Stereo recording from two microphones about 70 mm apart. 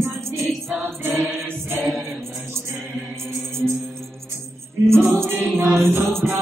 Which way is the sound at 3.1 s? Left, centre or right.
Right.